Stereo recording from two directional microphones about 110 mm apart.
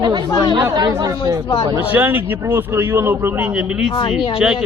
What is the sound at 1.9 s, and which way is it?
A man's voice, 15° right (ahead or behind).